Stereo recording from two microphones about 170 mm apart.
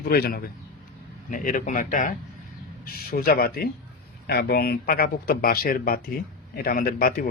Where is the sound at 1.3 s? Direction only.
50° left (ahead or behind).